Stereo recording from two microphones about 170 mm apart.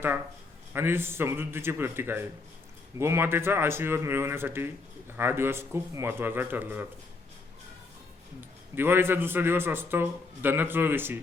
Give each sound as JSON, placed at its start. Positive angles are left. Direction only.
{"t": 0.7, "sound": "speech", "side_deg": -15}
{"t": 8.7, "sound": "speech", "side_deg": -15}